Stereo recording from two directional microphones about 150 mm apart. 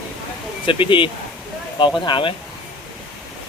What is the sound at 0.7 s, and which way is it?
Speech, 35° left (ahead or behind).